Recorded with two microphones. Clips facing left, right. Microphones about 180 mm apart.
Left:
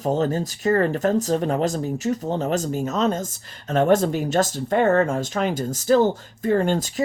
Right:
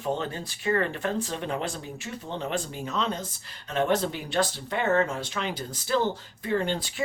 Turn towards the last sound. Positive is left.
turn(degrees=45)  # may be behind; listen again after turning